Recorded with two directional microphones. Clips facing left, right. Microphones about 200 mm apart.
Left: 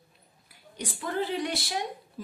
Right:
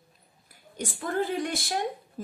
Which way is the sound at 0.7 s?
45° right (ahead or behind).